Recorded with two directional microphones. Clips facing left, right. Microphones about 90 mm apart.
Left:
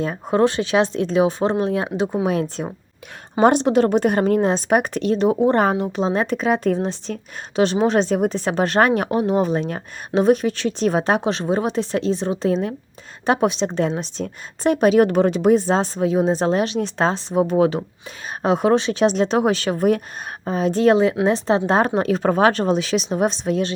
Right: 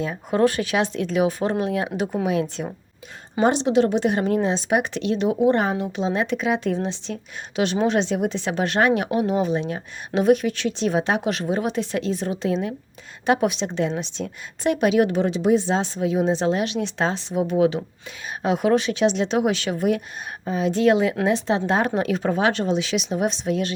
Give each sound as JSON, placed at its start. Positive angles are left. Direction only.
{"t": 0.0, "sound": "a woman's voice", "side_deg": 35}
{"t": 2.2, "sound": "a woman's voice", "side_deg": 40}
{"t": 3.4, "sound": "a woman's voice", "side_deg": 50}
{"t": 10.2, "sound": "a woman's voice", "side_deg": 35}